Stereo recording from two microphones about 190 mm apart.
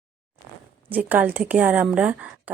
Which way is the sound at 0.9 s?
10° right (ahead or behind).